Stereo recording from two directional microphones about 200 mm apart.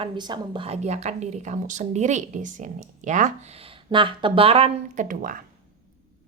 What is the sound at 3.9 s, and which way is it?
A woman's voice, 25° right (ahead or behind).